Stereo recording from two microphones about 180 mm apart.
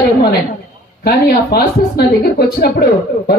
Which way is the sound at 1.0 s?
60° left (ahead or behind).